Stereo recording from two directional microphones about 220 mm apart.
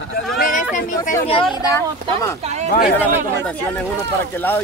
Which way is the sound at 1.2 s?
25° left (ahead or behind).